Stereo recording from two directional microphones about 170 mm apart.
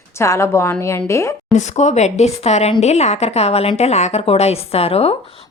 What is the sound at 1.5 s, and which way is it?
A woman's voice, 45° left (ahead or behind).